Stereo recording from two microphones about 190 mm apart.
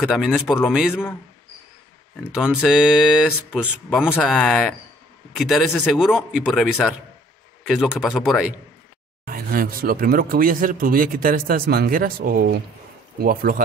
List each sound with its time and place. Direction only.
0.0 s speech: centre (ahead or behind)
2.3 s speech: 5° right (ahead or behind)
9.2 s speech: 50° right (ahead or behind)